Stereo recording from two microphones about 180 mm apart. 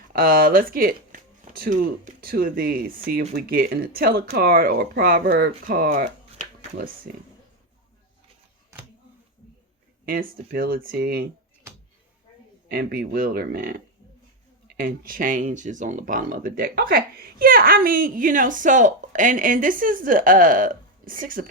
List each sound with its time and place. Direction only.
0.1 s speech: 55° right (ahead or behind)
7.1 s speech: 55° right (ahead or behind)
10.1 s speech: 55° right (ahead or behind)
12.6 s speech: 55° right (ahead or behind)